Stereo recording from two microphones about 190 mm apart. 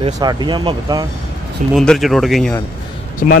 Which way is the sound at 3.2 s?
45° left (ahead or behind).